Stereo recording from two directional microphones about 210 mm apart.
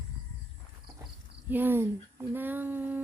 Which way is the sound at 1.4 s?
10° right (ahead or behind).